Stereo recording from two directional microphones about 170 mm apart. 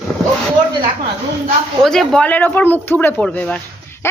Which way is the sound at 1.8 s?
5° left (ahead or behind).